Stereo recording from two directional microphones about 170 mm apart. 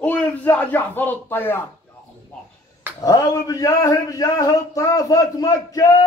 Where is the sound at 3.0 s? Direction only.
20° left (ahead or behind).